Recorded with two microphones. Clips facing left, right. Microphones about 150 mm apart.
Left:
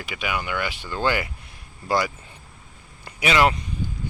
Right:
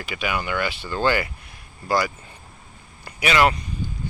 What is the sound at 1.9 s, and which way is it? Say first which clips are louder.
Speech: right 1 dB; 25° left (ahead or behind).